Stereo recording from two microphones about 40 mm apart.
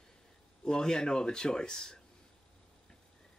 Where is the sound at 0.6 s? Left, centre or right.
Centre.